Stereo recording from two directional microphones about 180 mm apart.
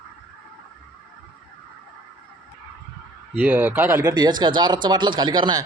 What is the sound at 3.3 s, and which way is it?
Speech, 10° right (ahead or behind).